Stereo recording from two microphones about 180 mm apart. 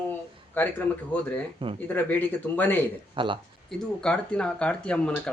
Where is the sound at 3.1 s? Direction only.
25° right (ahead or behind).